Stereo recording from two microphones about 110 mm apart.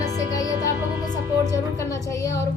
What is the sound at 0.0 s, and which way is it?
Music, 35° left (ahead or behind).